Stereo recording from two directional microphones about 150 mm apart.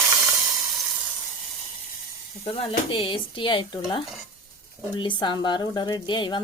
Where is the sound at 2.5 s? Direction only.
35° left (ahead or behind).